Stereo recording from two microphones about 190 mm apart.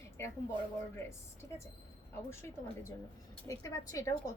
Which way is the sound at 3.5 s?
15° left (ahead or behind).